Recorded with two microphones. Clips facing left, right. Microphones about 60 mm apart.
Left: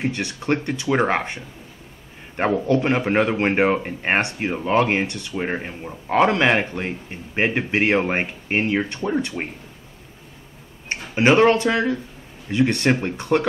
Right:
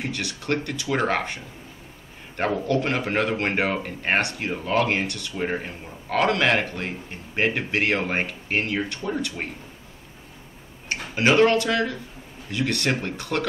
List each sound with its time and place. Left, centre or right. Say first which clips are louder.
0.0 s a man's voice: left 5 dB; left
10.9 s speech: left 3 dB; left